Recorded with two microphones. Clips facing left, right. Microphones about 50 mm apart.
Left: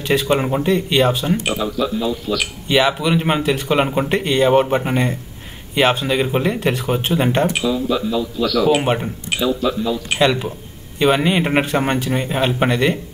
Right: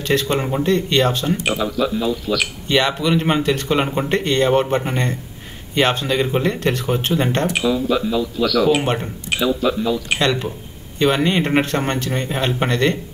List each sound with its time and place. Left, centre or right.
0.0 s speech: centre
1.4 s speech: centre
7.5 s speech: centre
9.5 s speech: centre